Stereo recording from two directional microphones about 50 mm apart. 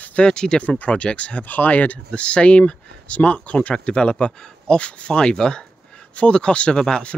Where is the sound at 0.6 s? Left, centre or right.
Left.